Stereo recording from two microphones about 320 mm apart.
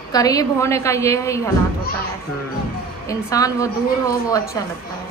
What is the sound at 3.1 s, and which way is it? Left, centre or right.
A man's voice, centre.